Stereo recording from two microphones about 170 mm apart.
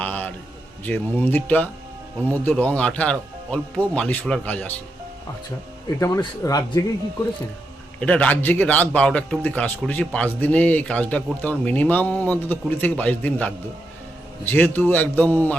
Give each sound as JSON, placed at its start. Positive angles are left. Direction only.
{"t": 0.0, "sound": "a sound", "side_deg": 10}
{"t": 0.9, "sound": "speech", "side_deg": 10}
{"t": 6.0, "sound": "speech", "side_deg": 20}
{"t": 8.0, "sound": "speech", "side_deg": 10}